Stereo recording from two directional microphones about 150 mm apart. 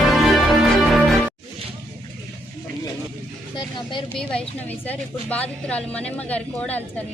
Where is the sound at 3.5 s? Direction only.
30° left (ahead or behind).